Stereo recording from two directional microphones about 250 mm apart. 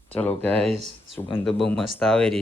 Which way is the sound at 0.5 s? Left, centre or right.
Right.